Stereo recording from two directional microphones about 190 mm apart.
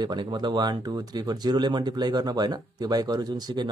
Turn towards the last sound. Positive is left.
turn(degrees=-20)  # may be behind; listen again after turning